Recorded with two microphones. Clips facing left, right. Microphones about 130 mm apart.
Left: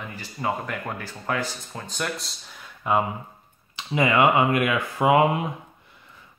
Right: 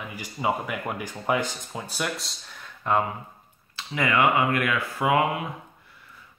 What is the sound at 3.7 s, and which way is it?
Speech, 20° left (ahead or behind).